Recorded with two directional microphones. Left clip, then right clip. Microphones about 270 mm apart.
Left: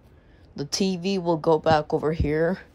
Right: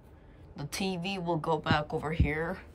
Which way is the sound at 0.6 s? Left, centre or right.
Centre.